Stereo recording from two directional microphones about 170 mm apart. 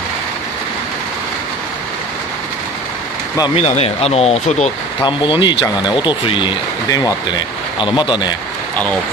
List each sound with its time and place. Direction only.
3.5 s speech: 40° left (ahead or behind)
5.0 s speech: 25° left (ahead or behind)